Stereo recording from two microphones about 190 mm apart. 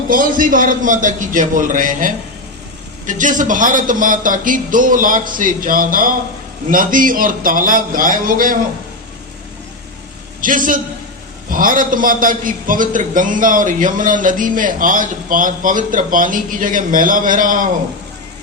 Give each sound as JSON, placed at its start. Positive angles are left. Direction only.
{"t": 0.1, "sound": "a man's voice", "side_deg": -45}
{"t": 10.4, "sound": "a man's voice", "side_deg": -45}